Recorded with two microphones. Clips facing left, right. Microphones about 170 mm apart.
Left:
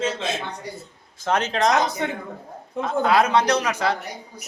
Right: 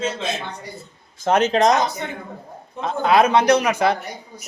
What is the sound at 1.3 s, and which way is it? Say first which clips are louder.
Speech: right 4 dB; 20° right (ahead or behind).